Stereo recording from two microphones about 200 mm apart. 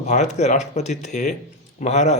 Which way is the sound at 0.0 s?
35° left (ahead or behind).